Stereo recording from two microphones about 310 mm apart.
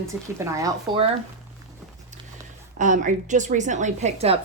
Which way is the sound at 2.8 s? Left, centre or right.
Right.